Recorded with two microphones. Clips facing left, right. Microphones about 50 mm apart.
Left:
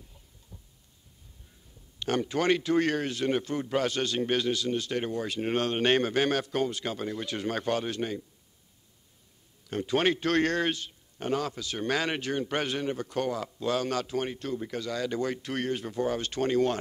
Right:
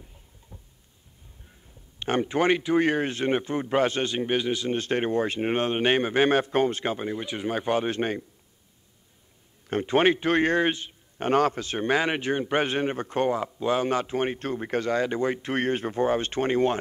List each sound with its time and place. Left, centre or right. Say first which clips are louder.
0.5 s a sound: right 3 dB; right
2.0 s speech: right 4 dB; right
9.7 s speech: right 5 dB; right
11.1 s a man's voice: right 8 dB; right